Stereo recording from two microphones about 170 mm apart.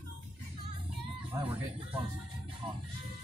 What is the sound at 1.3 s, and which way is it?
Speech, 20° right (ahead or behind).